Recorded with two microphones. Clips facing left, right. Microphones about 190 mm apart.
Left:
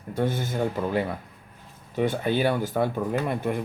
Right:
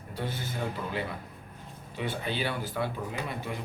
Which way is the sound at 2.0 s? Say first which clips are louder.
Left 9 dB; 50° left (ahead or behind).